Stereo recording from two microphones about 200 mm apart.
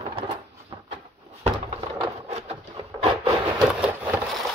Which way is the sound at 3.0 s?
30° right (ahead or behind).